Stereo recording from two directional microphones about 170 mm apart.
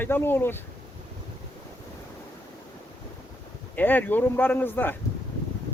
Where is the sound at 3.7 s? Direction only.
10° left (ahead or behind).